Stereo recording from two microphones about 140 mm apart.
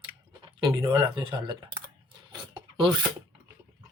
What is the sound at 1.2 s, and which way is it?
Speech, 35° right (ahead or behind).